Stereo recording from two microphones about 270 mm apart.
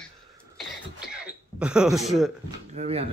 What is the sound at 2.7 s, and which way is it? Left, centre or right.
Speech, right.